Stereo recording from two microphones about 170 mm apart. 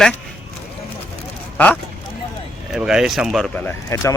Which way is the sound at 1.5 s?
10° left (ahead or behind).